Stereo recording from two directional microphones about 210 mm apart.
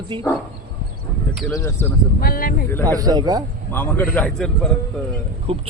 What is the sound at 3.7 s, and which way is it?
Speech, 10° left (ahead or behind).